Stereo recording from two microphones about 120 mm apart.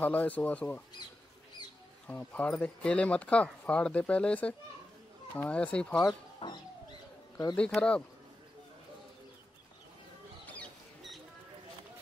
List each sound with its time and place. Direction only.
0.0 s speech: 15° left (ahead or behind)
2.0 s speech: 10° left (ahead or behind)
6.4 s bird: 45° left (ahead or behind)
7.5 s speech: 10° left (ahead or behind)
10.4 s a sound: 10° left (ahead or behind)